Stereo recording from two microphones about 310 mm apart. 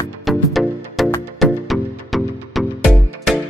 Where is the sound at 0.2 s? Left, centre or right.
Centre.